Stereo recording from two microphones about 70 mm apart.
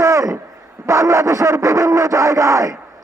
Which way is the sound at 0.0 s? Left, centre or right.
Right.